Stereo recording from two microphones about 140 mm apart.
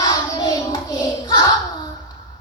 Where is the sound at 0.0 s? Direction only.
25° left (ahead or behind).